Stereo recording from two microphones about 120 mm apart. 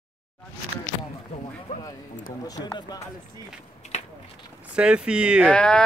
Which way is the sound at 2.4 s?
35° left (ahead or behind).